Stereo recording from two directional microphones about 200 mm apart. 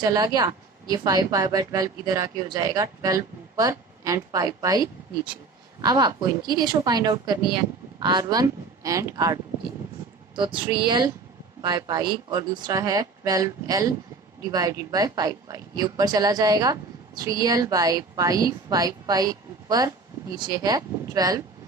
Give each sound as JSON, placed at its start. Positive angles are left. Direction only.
{"t": 0.0, "sound": "a woman's voice", "side_deg": -20}
{"t": 10.7, "sound": "a woman's voice", "side_deg": -25}